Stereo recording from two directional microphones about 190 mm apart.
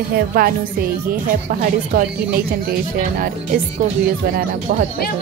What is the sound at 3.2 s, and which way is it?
Speech, 50° right (ahead or behind).